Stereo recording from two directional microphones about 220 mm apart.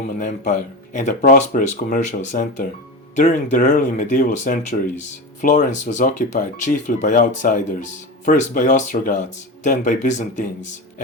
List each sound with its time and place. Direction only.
0.2 s speech: 35° left (ahead or behind)